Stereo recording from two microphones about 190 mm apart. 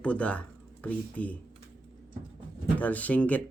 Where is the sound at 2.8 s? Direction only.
10° left (ahead or behind).